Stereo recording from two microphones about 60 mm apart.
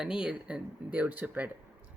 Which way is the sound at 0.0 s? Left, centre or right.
Centre.